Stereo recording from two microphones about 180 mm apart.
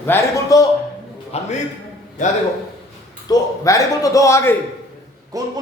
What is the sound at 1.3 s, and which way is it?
Speech, 35° left (ahead or behind).